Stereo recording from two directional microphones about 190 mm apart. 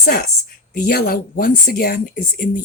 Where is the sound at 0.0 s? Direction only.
55° left (ahead or behind).